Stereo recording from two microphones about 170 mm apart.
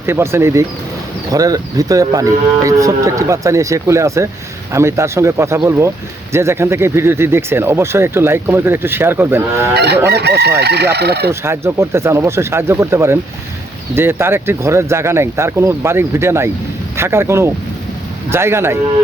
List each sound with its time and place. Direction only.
0.0 s speech: 15° right (ahead or behind)
9.7 s chicken: 75° right (ahead or behind)
11.3 s speech: 15° right (ahead or behind)